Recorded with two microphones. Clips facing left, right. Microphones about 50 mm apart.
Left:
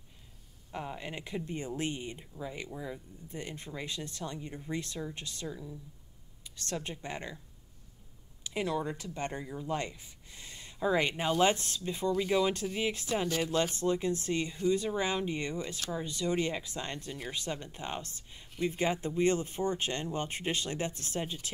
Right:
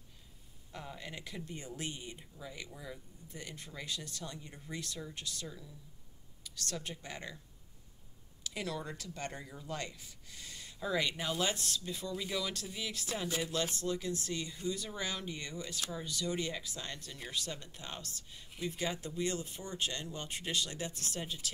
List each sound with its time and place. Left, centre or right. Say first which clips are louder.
0.7 s speech: left 6 dB; left
3.3 s speech: left 6 dB; left
8.5 s speech: left 7 dB; left